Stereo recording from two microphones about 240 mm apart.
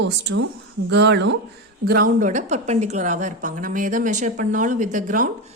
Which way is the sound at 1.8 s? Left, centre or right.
Right.